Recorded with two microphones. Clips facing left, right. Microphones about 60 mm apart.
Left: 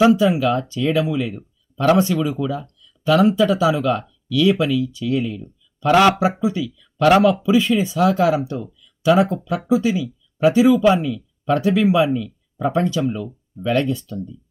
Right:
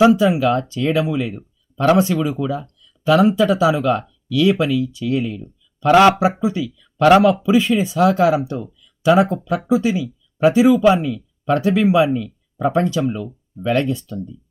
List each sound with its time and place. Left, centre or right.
0.0 s speech: right